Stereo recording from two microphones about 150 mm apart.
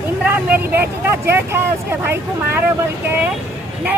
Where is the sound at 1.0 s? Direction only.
15° right (ahead or behind).